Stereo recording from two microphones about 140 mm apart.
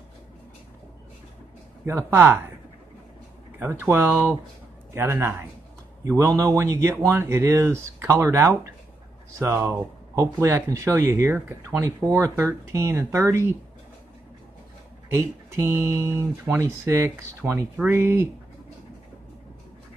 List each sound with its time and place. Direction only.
1.9 s speech: 15° right (ahead or behind)
3.5 s speech: 15° right (ahead or behind)
15.1 s speech: 20° right (ahead or behind)